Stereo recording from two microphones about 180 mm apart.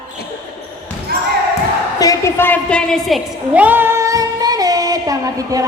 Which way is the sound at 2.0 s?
15° left (ahead or behind).